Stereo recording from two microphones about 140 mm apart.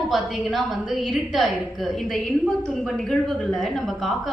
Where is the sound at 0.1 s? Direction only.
Centre (ahead or behind).